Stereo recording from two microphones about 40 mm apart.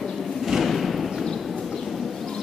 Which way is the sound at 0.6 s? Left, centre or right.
Centre.